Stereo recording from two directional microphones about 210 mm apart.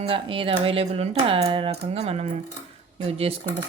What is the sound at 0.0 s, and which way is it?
A woman's voice, 25° right (ahead or behind).